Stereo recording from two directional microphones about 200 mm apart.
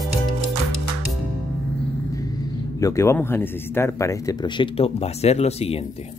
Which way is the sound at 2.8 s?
15° left (ahead or behind).